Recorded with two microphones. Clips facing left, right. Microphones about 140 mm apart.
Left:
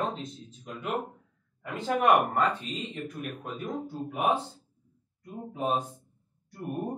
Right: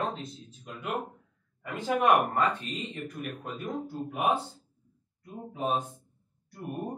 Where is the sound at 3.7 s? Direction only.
10° right (ahead or behind).